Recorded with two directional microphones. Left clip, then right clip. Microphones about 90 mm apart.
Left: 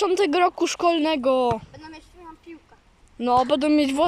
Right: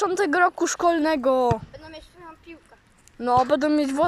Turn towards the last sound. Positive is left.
turn(degrees=20)  # may be behind; listen again after turning